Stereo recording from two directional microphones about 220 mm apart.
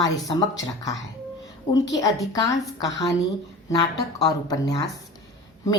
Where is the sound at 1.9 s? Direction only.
15° left (ahead or behind).